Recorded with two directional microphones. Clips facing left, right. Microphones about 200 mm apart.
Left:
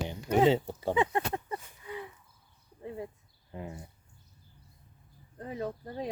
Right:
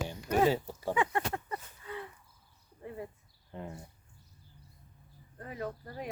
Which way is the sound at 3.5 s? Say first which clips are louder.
Left 1 dB; 5° left (ahead or behind).